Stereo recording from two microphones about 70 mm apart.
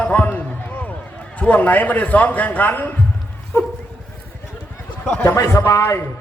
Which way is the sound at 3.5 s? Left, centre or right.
Left.